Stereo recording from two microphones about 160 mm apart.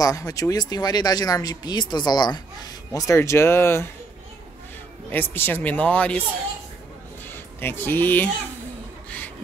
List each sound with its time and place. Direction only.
0.0 s speech: 20° left (ahead or behind)
5.1 s speech: 15° left (ahead or behind)
7.6 s speech: 15° left (ahead or behind)